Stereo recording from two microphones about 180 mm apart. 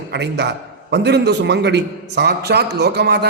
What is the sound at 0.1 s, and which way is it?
A man's voice, 70° right (ahead or behind).